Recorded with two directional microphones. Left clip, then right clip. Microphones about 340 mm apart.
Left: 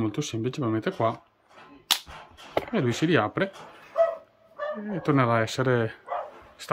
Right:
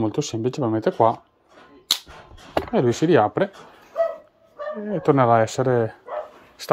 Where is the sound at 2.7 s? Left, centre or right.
Centre.